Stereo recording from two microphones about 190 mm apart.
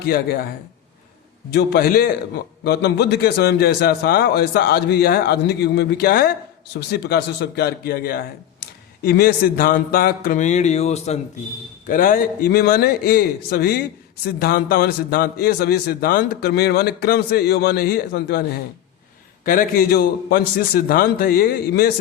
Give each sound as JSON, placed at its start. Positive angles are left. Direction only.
{"t": 0.0, "sound": "a man's voice", "side_deg": 50}
{"t": 1.5, "sound": "a man's voice", "side_deg": 55}
{"t": 11.9, "sound": "a man's voice", "side_deg": 45}
{"t": 19.5, "sound": "a man's voice", "side_deg": 50}